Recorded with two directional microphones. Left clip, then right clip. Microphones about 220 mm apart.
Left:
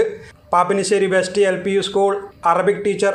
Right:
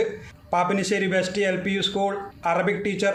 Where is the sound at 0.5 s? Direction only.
Centre (ahead or behind).